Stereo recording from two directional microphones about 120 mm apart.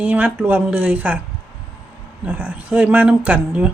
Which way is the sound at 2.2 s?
15° right (ahead or behind).